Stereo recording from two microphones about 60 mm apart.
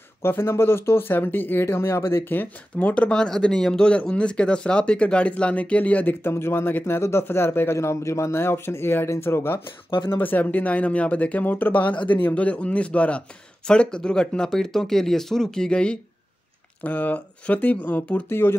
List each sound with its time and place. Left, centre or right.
0.2 s speech: left
2.8 s speech: left
6.2 s speech: left
10.1 s speech: left
16.8 s speech: left